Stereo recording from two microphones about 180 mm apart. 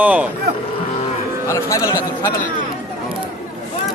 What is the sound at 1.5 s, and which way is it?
Speech, 15° left (ahead or behind).